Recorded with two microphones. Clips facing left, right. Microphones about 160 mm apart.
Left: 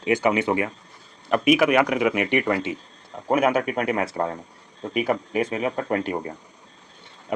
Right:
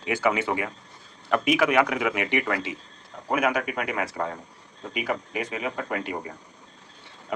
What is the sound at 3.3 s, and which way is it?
Speech, 30° left (ahead or behind).